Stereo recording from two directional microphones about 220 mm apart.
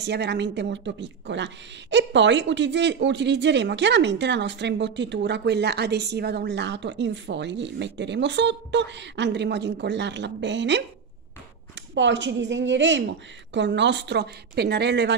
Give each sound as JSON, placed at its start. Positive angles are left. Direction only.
{"t": 0.0, "sound": "a woman's voice", "side_deg": -50}
{"t": 11.9, "sound": "a woman's voice", "side_deg": -55}